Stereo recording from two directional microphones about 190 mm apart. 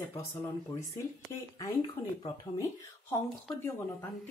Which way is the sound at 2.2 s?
20° left (ahead or behind).